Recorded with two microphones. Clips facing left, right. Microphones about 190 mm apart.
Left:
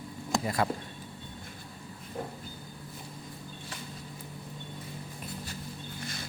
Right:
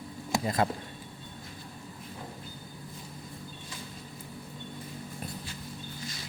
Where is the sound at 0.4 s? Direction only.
25° right (ahead or behind).